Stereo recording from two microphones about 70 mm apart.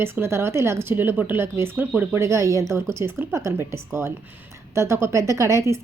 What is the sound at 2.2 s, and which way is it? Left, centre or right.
A woman's voice, right.